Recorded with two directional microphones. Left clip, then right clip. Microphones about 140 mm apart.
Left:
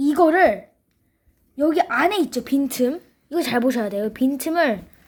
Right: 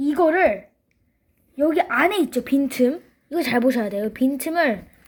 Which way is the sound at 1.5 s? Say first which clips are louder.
Even; centre (ahead or behind).